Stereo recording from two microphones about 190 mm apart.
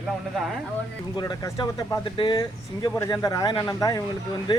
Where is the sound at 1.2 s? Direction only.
20° left (ahead or behind).